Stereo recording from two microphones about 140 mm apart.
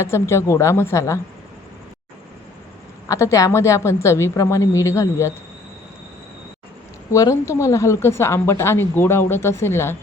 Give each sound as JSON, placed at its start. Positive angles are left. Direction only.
{"t": 0.0, "sound": "a woman's voice", "side_deg": 20}
{"t": 3.1, "sound": "a woman's voice", "side_deg": 20}
{"t": 7.1, "sound": "speech", "side_deg": 20}